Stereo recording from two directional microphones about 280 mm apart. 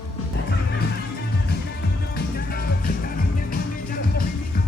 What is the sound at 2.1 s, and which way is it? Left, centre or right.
Music, left.